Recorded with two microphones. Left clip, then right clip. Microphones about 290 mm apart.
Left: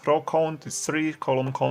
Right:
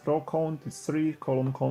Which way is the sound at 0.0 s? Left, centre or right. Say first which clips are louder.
Left 6 dB; left.